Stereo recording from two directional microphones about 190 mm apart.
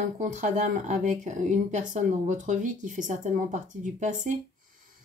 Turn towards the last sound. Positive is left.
turn(degrees=-40)  # may be behind; listen again after turning